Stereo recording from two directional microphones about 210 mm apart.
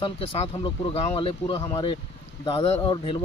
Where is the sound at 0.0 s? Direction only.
25° left (ahead or behind).